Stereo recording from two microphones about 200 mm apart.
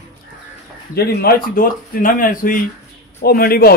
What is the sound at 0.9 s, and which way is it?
A man's voice, 50° left (ahead or behind).